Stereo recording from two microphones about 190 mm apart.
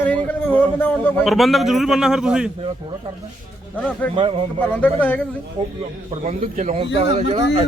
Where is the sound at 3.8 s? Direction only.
5° left (ahead or behind).